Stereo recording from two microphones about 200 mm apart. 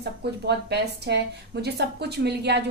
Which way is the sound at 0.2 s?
55° right (ahead or behind).